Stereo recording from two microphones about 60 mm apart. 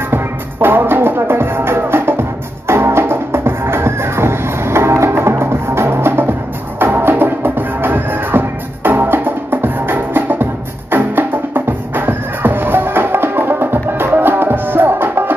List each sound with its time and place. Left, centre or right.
0.1 s music: right